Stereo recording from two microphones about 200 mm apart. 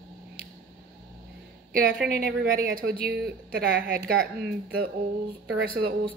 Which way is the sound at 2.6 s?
45° right (ahead or behind).